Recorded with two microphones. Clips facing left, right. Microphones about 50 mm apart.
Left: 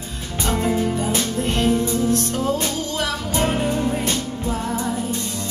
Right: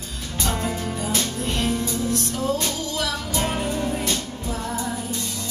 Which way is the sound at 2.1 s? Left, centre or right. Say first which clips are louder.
Left 5 dB; left.